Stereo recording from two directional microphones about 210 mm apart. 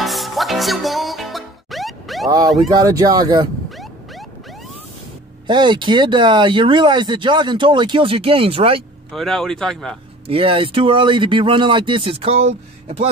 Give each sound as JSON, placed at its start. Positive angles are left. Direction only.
{"t": 0.0, "sound": "music", "side_deg": 0}
{"t": 2.2, "sound": "speech", "side_deg": -15}
{"t": 5.5, "sound": "speech", "side_deg": -20}
{"t": 9.1, "sound": "speech", "side_deg": 0}
{"t": 10.2, "sound": "speech", "side_deg": -25}